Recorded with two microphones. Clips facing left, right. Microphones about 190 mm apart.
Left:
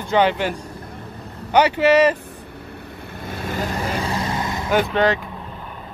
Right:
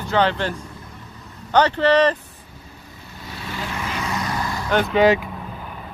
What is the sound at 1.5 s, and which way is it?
Speech, 10° left (ahead or behind).